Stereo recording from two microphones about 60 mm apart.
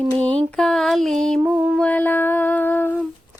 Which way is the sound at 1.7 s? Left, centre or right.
Left.